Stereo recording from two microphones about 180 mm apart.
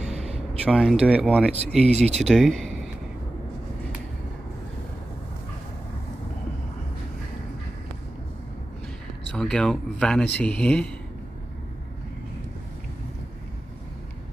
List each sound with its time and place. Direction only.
0.1 s a sound: 35° right (ahead or behind)
0.7 s speech: 5° right (ahead or behind)
1.8 s speech: 35° right (ahead or behind)
2.2 s speech: 5° left (ahead or behind)
9.3 s speech: 5° left (ahead or behind)